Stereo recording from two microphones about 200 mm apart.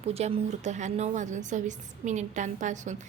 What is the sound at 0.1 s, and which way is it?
A woman's voice, 30° right (ahead or behind).